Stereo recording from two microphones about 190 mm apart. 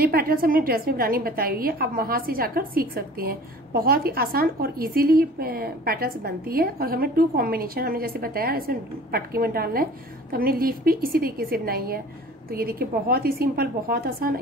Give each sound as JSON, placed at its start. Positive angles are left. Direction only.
{"t": 0.0, "sound": "a woman's voice", "side_deg": -50}